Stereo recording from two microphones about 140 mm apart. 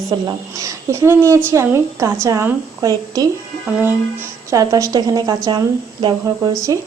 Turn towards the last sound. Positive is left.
turn(degrees=-25)  # may be behind; listen again after turning